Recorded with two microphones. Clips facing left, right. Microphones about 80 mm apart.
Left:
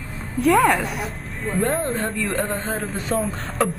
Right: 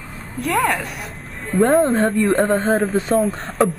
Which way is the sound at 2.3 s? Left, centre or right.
Right.